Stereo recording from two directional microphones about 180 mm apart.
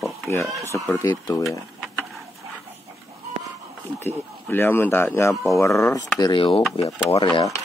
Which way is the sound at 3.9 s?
10° left (ahead or behind).